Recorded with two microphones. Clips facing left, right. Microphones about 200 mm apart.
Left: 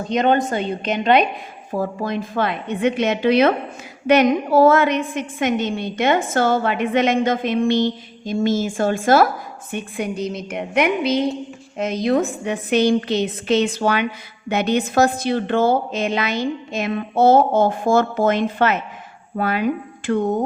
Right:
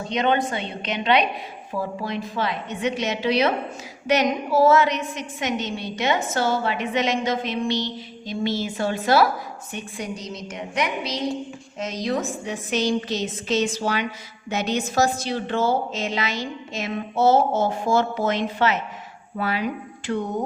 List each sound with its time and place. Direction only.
0.1 s a woman's voice: 45° left (ahead or behind)